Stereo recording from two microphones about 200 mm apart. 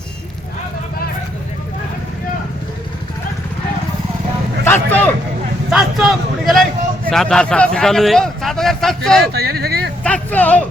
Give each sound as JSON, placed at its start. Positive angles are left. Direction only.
{"t": 4.6, "sound": "a man's voice", "side_deg": 10}
{"t": 9.3, "sound": "speech", "side_deg": -50}
{"t": 10.0, "sound": "speech", "side_deg": 5}